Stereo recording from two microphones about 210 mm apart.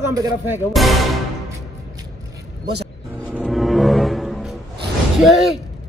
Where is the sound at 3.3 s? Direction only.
Centre (ahead or behind).